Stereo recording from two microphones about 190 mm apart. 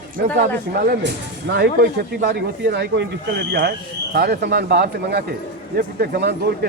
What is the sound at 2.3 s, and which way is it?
Speech, 65° right (ahead or behind).